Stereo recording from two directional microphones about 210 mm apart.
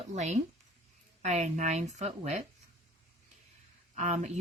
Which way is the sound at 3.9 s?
30° right (ahead or behind).